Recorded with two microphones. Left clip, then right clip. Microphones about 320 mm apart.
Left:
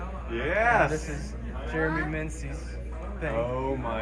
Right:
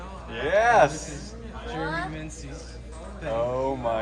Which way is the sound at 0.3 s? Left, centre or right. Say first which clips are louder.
Right 3 dB; right.